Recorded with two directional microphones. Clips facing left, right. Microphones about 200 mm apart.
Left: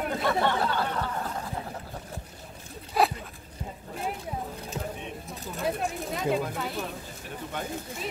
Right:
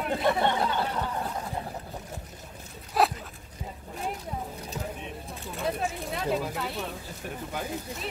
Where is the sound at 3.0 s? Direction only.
Centre (ahead or behind).